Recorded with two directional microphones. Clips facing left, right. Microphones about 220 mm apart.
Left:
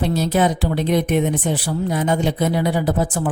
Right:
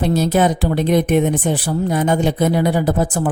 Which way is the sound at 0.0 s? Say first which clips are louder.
Right 3 dB; 50° right (ahead or behind).